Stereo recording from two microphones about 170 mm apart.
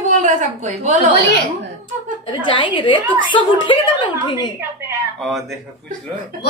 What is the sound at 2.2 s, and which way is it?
A woman's voice, 30° left (ahead or behind).